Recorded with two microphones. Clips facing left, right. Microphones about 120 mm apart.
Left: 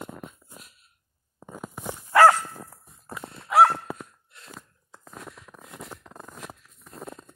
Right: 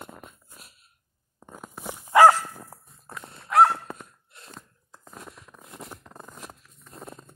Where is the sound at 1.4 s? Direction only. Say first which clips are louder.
Left 3 dB; centre (ahead or behind).